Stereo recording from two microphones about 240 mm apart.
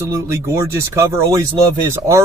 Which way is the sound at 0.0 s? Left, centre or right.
Centre.